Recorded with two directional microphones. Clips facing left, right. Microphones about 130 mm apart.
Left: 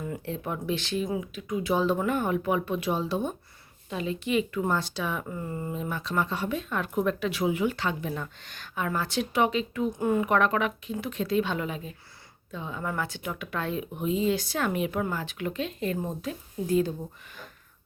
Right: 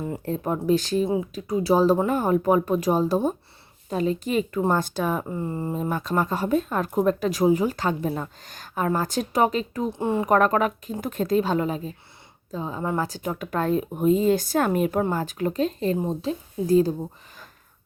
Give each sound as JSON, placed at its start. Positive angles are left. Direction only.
{"t": 0.0, "sound": "speech", "side_deg": -35}
{"t": 5.3, "sound": "speech", "side_deg": -30}
{"t": 10.2, "sound": "speech", "side_deg": -40}